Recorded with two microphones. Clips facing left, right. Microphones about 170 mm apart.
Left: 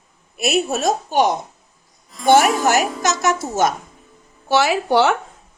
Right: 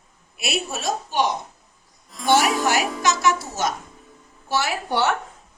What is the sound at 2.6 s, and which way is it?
A woman's voice, 45° left (ahead or behind).